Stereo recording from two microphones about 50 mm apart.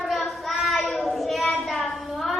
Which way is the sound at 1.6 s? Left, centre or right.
Centre.